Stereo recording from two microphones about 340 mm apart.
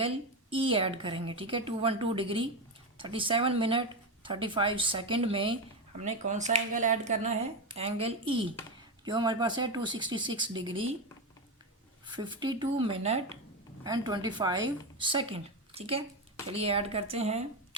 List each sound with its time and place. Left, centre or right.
0.5 s a woman's voice: centre
12.0 s speech: centre